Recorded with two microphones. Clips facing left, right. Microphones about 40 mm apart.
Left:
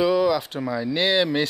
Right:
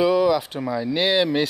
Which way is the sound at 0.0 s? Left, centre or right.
Centre.